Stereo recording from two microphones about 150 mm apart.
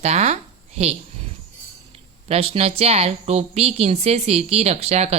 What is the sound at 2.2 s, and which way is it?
A woman's voice, 40° right (ahead or behind).